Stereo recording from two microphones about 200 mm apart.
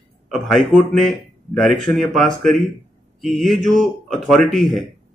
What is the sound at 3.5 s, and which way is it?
Speech, 40° right (ahead or behind).